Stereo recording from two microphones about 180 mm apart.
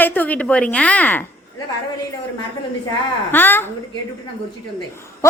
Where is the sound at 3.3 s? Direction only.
10° left (ahead or behind).